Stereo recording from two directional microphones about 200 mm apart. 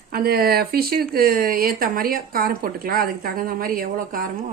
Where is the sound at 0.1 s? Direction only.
50° right (ahead or behind).